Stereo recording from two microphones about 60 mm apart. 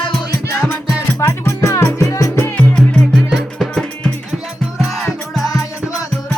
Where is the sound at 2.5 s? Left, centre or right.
Centre.